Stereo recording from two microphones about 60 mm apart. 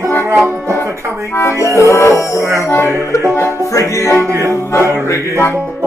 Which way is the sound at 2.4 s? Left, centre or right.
Right.